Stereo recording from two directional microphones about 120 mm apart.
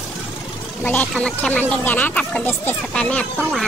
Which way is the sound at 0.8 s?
15° left (ahead or behind).